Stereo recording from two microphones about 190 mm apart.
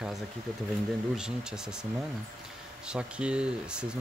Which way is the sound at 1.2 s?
5° right (ahead or behind).